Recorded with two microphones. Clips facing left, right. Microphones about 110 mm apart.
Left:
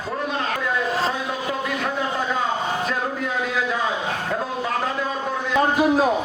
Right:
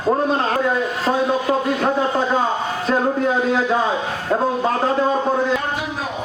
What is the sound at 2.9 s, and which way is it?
Speech, 30° right (ahead or behind).